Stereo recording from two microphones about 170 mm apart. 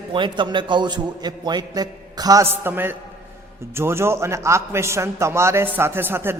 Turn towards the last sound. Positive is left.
turn(degrees=-15)  # may be behind; listen again after turning